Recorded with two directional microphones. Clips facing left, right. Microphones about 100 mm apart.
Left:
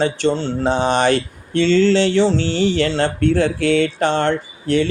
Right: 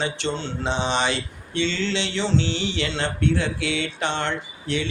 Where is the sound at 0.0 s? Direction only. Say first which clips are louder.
Left 9 dB; 40° left (ahead or behind).